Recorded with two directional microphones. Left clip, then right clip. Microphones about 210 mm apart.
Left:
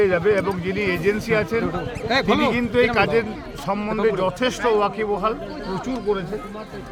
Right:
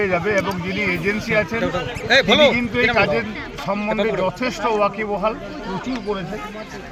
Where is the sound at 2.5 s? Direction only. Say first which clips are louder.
Right 1 dB; 25° left (ahead or behind).